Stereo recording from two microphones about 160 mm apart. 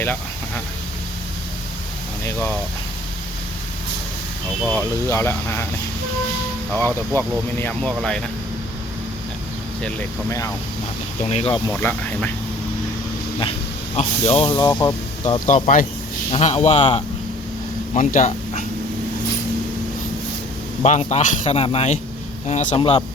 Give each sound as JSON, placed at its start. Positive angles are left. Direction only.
{"t": 2.2, "sound": "speech", "side_deg": 10}
{"t": 4.7, "sound": "speech", "side_deg": 15}
{"t": 7.2, "sound": "speech", "side_deg": 10}
{"t": 9.8, "sound": "speech", "side_deg": 15}
{"t": 11.2, "sound": "speech", "side_deg": 40}
{"t": 11.8, "sound": "speech", "side_deg": 10}
{"t": 13.9, "sound": "speech", "side_deg": 40}
{"t": 14.5, "sound": "speech", "side_deg": 25}
{"t": 15.4, "sound": "speech", "side_deg": 50}
{"t": 16.3, "sound": "speech", "side_deg": 40}
{"t": 20.8, "sound": "speech", "side_deg": 45}
{"t": 22.8, "sound": "speech", "side_deg": 30}